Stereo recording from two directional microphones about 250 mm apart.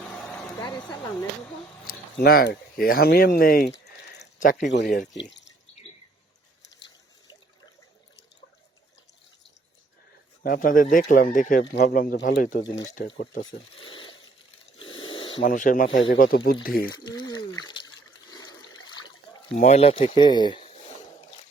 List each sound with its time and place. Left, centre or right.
0.3 s a sound: centre
2.2 s speech: left
10.4 s speech: left
14.8 s pulleys: centre
15.4 s speech: left
16.8 s speech: centre
17.6 s trickle: centre
18.9 s a sound: centre
19.5 s speech: left